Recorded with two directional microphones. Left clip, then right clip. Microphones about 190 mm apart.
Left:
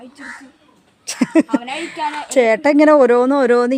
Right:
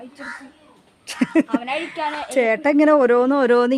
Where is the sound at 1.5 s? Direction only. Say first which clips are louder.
Left 1 dB; 25° right (ahead or behind).